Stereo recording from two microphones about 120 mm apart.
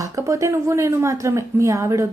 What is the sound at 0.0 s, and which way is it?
A woman's voice, 25° right (ahead or behind).